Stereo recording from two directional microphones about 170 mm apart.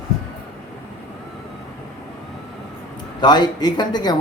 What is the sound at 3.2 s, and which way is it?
Speech, 25° left (ahead or behind).